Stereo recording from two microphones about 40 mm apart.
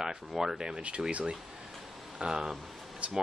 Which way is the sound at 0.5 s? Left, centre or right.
Right.